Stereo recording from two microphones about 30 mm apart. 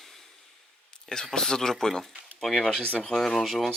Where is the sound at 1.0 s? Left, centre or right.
Left.